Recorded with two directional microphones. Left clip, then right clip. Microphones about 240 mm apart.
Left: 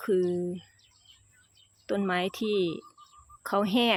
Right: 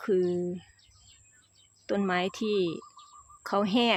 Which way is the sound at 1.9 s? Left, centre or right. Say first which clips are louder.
Even; centre.